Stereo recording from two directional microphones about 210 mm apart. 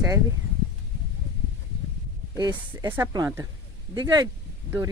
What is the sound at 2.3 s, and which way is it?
Speech, 20° right (ahead or behind).